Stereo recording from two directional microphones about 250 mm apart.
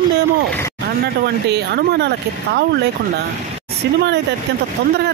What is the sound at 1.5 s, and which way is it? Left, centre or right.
Speech, right.